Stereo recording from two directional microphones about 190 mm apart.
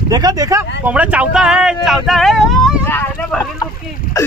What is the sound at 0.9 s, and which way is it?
Speech, 5° right (ahead or behind).